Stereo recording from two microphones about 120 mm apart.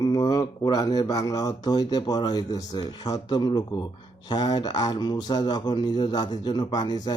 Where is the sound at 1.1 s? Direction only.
30° left (ahead or behind).